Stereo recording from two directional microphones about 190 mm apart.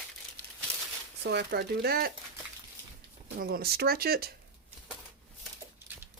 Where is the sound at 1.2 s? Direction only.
60° right (ahead or behind).